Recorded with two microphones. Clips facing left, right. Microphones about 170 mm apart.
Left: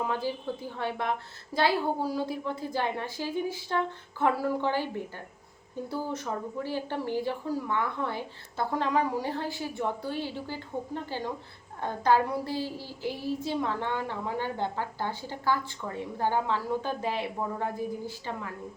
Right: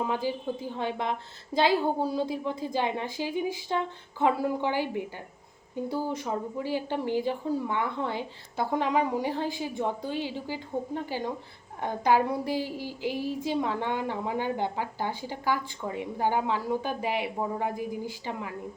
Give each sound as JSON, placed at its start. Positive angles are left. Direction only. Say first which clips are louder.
{"t": 0.1, "sound": "a woman's voice", "louder": "right 2 dB", "side_deg": -15}